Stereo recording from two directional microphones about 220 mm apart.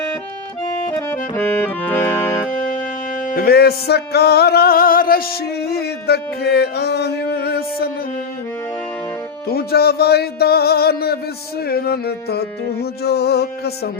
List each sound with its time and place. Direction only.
0.9 s music: 10° left (ahead or behind)
3.3 s music: 45° left (ahead or behind)
9.5 s music: 45° left (ahead or behind)